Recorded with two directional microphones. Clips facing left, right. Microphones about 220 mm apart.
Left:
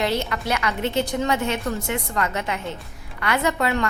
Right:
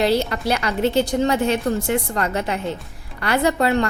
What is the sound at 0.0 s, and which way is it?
A woman's voice, 35° right (ahead or behind).